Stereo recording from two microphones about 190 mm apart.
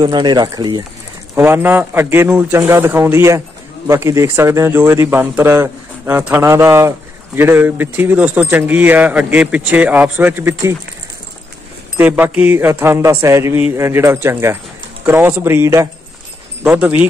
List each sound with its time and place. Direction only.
0.0 s speech: 25° right (ahead or behind)
1.3 s a man's voice: 10° right (ahead or behind)
12.0 s a man's voice: 10° right (ahead or behind)